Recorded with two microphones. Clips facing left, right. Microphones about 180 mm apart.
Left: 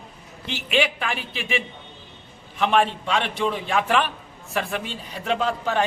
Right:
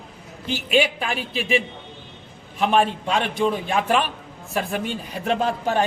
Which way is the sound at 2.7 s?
40° right (ahead or behind).